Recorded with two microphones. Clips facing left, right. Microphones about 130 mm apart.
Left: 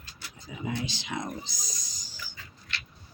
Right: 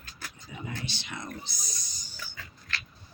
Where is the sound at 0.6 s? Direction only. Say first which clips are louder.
Left 6 dB; 90° left.